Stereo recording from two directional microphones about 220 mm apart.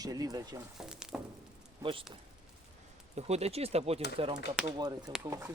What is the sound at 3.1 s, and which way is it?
Speech, 30° right (ahead or behind).